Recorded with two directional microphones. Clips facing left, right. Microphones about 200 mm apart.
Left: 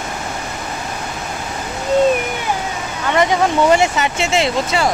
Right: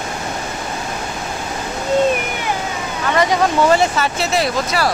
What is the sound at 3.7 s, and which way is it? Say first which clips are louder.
Speech: left 1 dB; 20° left (ahead or behind).